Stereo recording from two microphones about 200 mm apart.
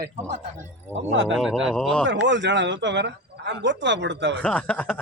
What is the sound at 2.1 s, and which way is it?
Speech, 65° right (ahead or behind).